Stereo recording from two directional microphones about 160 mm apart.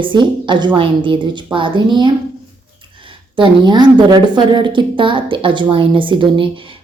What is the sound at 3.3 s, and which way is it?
A woman's voice, 30° right (ahead or behind).